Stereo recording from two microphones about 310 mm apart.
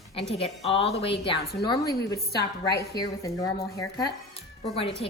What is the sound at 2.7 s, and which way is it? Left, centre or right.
Speech, left.